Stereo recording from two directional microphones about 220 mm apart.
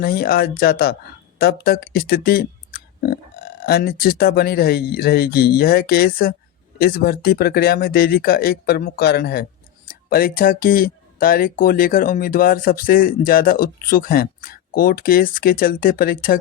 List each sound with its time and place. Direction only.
0.0 s speech: 45° left (ahead or behind)